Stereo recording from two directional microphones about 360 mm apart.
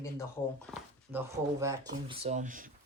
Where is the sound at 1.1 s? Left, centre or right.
Centre.